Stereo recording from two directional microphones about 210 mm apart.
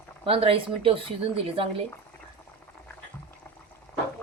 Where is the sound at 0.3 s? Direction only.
25° right (ahead or behind).